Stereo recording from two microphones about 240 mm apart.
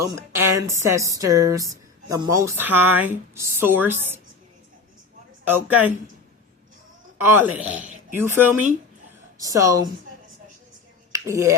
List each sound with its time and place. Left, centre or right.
0.0 s speech: centre
5.5 s speech: centre
7.2 s speech: centre
11.1 s a sound: centre